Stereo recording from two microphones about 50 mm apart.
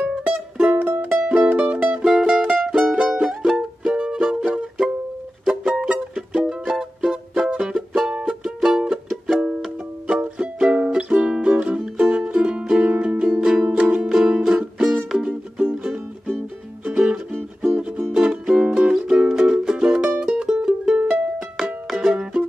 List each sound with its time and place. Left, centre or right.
0.2 s music: right
0.7 s music: right
1.2 s music: centre
2.0 s music: centre
3.8 s music: centre
7.3 s music: centre
10.0 s music: right
20.1 s music: right